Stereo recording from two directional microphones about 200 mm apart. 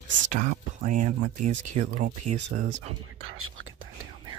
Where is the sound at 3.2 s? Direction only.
90° right.